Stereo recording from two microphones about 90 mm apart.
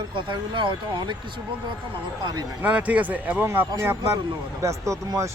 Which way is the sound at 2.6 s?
15° right (ahead or behind).